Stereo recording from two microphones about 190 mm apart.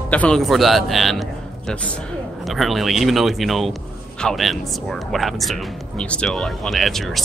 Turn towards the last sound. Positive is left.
turn(degrees=0)  # may be behind; listen again after turning